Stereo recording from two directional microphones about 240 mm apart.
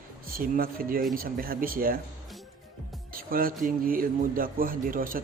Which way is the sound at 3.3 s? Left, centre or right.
Right.